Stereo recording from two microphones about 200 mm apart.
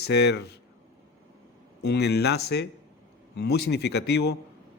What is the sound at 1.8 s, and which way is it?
A man's voice, 55° left (ahead or behind).